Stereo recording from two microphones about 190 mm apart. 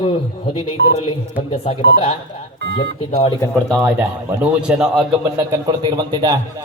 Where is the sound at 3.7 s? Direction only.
5° right (ahead or behind).